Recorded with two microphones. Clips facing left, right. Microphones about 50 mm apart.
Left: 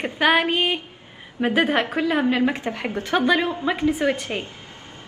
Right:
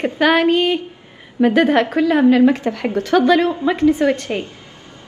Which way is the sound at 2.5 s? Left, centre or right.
Left.